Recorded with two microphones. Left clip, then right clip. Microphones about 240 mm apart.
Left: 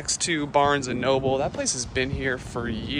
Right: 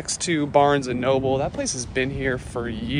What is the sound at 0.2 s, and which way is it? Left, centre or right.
Speech, centre.